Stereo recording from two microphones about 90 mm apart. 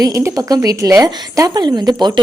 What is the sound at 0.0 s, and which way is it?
Speech, 35° right (ahead or behind).